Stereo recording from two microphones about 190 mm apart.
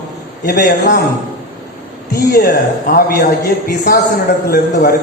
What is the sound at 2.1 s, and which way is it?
A man's voice, 55° left (ahead or behind).